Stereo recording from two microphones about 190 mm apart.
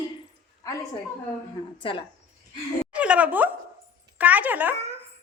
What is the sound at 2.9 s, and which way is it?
A woman's voice, 5° right (ahead or behind).